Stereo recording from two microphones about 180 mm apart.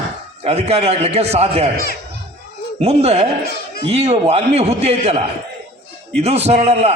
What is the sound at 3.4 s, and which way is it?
Music, 60° left (ahead or behind).